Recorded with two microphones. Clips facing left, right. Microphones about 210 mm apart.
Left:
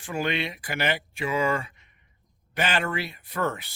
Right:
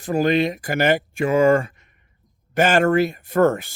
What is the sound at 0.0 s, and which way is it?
Speech, 40° right (ahead or behind).